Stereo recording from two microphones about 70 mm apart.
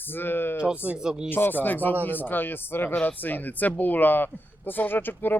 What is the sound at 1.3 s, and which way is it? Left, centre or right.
Speech, left.